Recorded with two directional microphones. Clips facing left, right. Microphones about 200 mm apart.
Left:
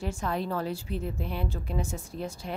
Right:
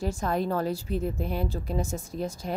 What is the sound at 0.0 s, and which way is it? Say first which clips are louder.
Speech: right 3 dB; 40° right (ahead or behind).